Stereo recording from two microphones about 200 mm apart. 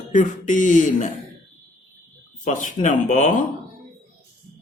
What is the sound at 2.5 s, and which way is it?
Speech, 40° left (ahead or behind).